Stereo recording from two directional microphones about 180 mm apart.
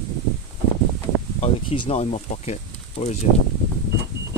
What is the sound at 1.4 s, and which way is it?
Speech, 30° left (ahead or behind).